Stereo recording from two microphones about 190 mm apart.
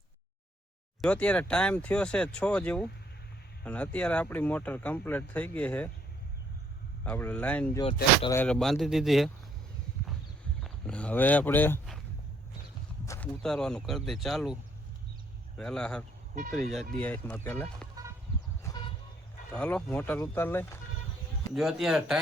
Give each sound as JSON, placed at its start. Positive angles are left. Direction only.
{"t": 1.0, "sound": "speech", "side_deg": 5}
{"t": 7.0, "sound": "speech", "side_deg": 10}
{"t": 10.6, "sound": "speech", "side_deg": 5}
{"t": 13.1, "sound": "speech", "side_deg": 5}
{"t": 18.6, "sound": "vehicle", "side_deg": 20}
{"t": 19.5, "sound": "speech", "side_deg": 5}
{"t": 21.5, "sound": "speech", "side_deg": 0}